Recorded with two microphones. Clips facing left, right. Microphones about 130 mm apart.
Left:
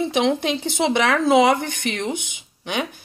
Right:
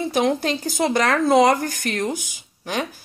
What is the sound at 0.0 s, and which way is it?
A woman's voice, centre (ahead or behind).